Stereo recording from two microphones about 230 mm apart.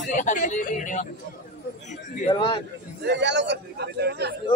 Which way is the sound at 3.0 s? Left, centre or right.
Right.